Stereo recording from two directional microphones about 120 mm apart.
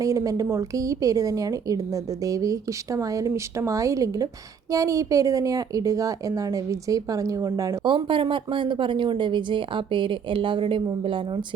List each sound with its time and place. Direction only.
0.0 s a woman's voice: 30° right (ahead or behind)
7.9 s speech: 45° right (ahead or behind)